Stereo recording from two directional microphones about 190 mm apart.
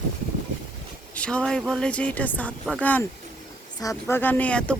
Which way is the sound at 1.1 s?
5° left (ahead or behind).